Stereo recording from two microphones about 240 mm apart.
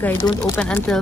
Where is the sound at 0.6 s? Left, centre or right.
Centre.